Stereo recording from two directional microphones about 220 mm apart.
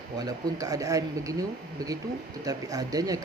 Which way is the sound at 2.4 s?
15° right (ahead or behind).